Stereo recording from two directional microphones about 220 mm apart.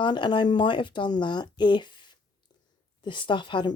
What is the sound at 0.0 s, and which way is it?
Speech, 20° left (ahead or behind).